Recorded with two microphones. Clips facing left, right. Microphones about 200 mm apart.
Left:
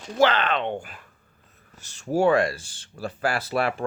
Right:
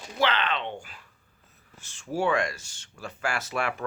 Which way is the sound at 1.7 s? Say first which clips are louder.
Left 6 dB; 40° left (ahead or behind).